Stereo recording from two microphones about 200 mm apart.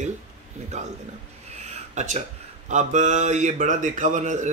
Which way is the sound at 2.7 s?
35° right (ahead or behind).